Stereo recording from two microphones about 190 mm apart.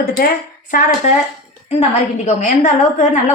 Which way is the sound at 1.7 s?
35° left (ahead or behind).